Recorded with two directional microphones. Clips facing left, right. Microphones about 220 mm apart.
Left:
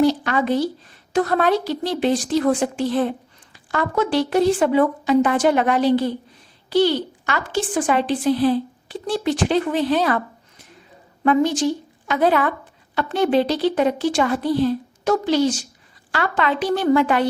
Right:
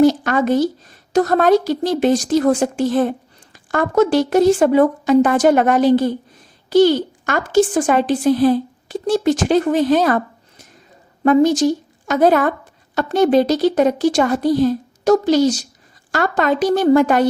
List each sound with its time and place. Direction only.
0.0 s a woman's voice: 45° right (ahead or behind)